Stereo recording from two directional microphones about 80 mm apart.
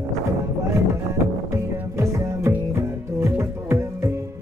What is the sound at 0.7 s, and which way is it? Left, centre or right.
Music, right.